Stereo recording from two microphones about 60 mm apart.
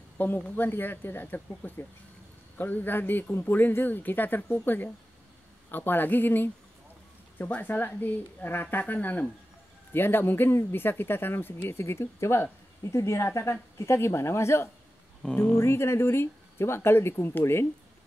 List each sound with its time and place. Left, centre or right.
0.2 s speech: left
2.5 s speech: left